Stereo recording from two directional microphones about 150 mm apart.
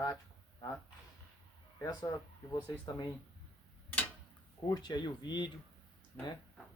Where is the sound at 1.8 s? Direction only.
25° left (ahead or behind).